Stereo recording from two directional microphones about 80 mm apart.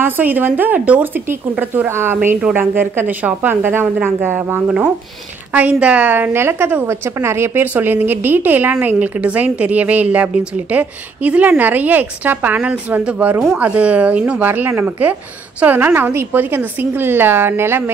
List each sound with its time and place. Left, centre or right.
0.0 s a woman's voice: right
1.9 s a woman's voice: right